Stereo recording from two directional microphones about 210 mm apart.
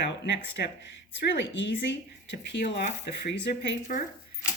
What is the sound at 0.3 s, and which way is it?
Speech, 55° left (ahead or behind).